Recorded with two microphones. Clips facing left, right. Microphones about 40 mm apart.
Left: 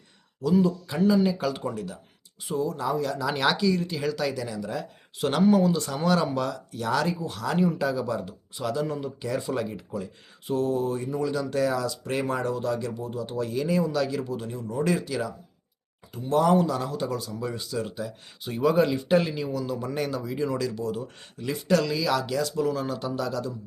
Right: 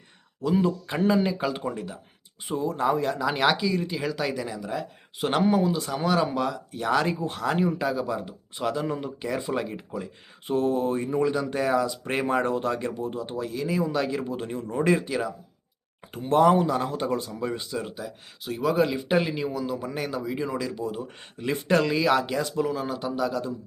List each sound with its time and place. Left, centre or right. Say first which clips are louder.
0.4 s speech: left 1 dB; right
1.3 s speech: even; centre
3.2 s speech: right 1 dB; centre; by 7.6 s right
7.6 s speech: even; centre; by 13.3 s right
13.3 s speech: left 4 dB; centre
13.9 s speech: even; right
16.1 s speech: right 1 dB; right
16.4 s speech: right 2 dB; right
17.8 s speech: left 2 dB; centre
18.9 s speech: left 1 dB; centre